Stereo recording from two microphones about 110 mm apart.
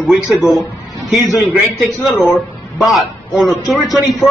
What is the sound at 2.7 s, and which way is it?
A man's voice, centre (ahead or behind).